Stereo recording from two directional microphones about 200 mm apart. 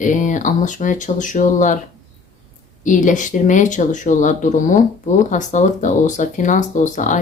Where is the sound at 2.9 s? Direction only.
40° left (ahead or behind).